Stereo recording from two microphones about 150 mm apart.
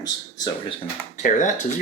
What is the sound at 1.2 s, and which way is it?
Speech, 60° left (ahead or behind).